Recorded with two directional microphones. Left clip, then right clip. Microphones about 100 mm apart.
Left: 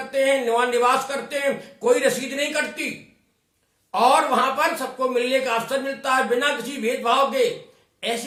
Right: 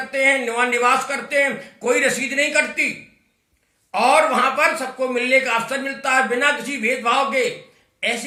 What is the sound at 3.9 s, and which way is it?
A man's voice, 15° left (ahead or behind).